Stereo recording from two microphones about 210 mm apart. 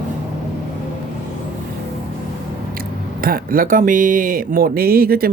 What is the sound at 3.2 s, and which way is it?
Speech, 45° right (ahead or behind).